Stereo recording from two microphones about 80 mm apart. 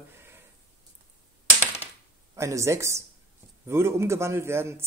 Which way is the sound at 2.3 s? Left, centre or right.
Right.